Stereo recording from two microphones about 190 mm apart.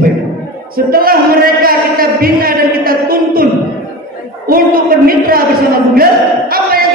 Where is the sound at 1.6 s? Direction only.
50° right (ahead or behind).